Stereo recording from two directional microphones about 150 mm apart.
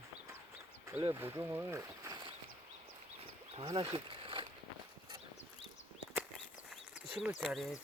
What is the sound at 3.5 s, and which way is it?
Wild animals, 40° right (ahead or behind).